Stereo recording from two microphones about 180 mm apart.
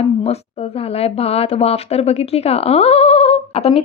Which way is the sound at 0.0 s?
35° left (ahead or behind).